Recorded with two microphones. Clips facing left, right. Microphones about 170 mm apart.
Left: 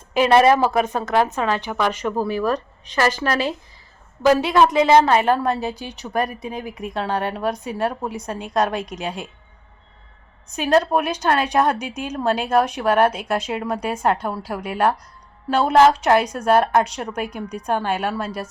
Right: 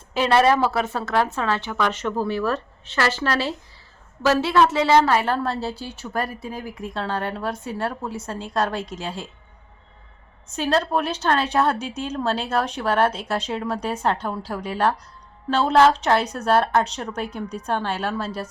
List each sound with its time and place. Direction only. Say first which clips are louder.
0.1 s a woman's voice: left 3 dB; 15° left (ahead or behind)
10.5 s a woman's voice: left 4 dB; 15° left (ahead or behind)